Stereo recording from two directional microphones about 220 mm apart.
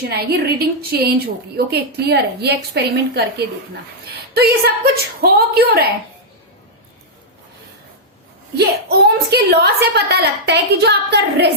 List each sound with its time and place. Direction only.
0.0 s a woman's voice: 45° right (ahead or behind)
8.5 s a woman's voice: 45° right (ahead or behind)